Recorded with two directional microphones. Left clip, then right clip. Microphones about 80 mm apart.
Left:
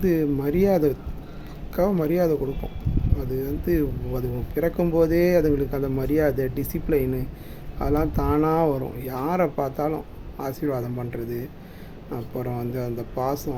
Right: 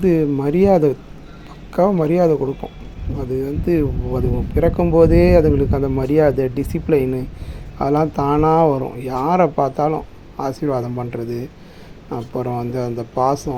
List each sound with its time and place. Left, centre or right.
0.0 s speech: right